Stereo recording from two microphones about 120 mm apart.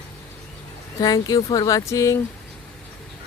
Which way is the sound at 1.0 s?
35° left (ahead or behind).